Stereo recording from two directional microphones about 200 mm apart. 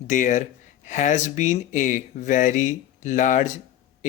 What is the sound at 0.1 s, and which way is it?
Speech, 40° left (ahead or behind).